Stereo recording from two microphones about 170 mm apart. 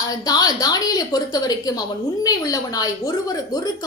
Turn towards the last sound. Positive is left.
turn(degrees=20)  # may be behind; listen again after turning